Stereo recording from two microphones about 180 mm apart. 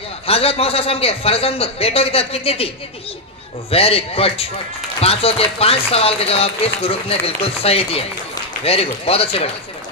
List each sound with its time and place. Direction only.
0.3 s speech: 35° left (ahead or behind)
3.7 s speech: 35° left (ahead or behind)